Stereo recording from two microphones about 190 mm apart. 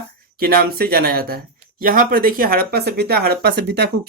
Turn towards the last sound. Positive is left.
turn(degrees=-60)  # may be behind; listen again after turning